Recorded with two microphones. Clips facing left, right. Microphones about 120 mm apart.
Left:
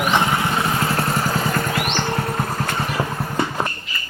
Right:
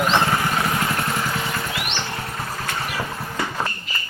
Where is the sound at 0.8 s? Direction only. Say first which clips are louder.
Left 3 dB; 35° left (ahead or behind); by 2.7 s 50° left (ahead or behind).